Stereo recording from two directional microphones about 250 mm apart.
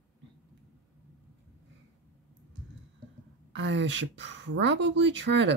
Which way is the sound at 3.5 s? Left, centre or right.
Right.